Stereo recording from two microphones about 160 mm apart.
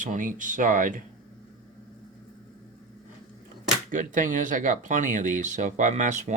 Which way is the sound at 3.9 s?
55° right (ahead or behind).